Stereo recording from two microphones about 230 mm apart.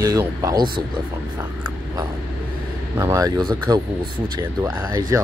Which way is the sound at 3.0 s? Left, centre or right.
Centre.